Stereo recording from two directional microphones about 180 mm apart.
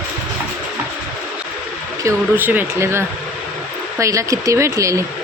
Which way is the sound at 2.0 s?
10° right (ahead or behind).